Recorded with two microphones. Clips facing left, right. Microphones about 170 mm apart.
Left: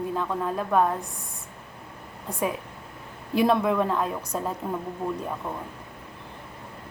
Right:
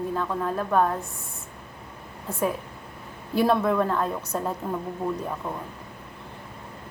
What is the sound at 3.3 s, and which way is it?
A woman's voice, 15° left (ahead or behind).